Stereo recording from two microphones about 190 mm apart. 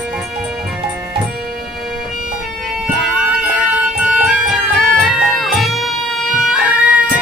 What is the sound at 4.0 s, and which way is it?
Music, 5° right (ahead or behind).